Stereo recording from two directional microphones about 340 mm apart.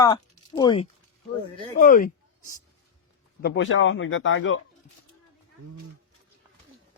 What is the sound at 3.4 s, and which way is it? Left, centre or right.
Speech, left.